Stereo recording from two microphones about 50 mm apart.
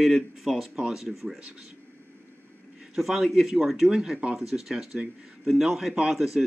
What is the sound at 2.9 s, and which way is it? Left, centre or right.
A man's voice, centre.